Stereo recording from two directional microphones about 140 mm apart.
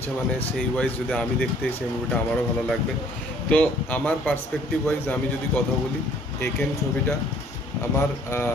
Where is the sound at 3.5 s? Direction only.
10° left (ahead or behind).